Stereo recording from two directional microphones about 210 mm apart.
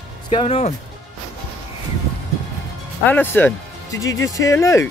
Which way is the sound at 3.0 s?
10° left (ahead or behind).